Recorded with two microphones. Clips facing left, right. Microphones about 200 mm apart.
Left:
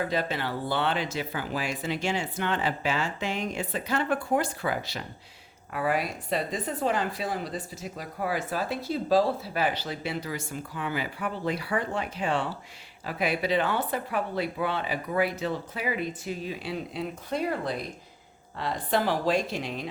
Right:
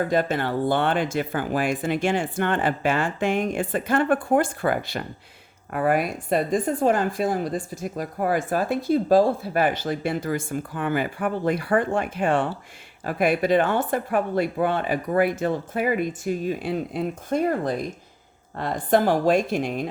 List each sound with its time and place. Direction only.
0.0 s speech: 50° right (ahead or behind)